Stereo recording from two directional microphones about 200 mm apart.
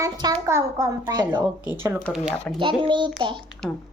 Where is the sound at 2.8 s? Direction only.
25° right (ahead or behind).